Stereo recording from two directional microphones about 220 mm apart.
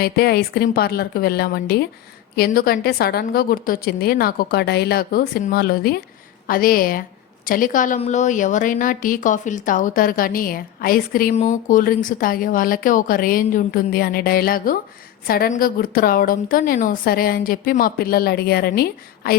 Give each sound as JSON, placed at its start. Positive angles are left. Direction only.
{"t": 0.0, "sound": "a woman's voice", "side_deg": 45}